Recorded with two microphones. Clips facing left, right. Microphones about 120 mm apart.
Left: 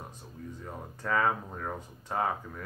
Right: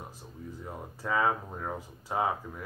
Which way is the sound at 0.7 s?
10° right (ahead or behind).